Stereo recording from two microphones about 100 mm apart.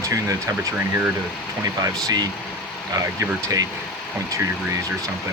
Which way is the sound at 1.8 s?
40° right (ahead or behind).